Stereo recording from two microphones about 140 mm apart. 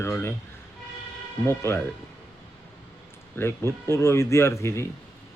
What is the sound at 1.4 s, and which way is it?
Speech, 15° left (ahead or behind).